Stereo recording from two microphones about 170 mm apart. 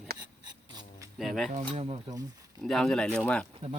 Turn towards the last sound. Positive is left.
turn(degrees=5)  # may be behind; listen again after turning